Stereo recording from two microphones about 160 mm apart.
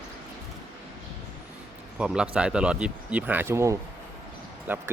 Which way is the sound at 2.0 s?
5° right (ahead or behind).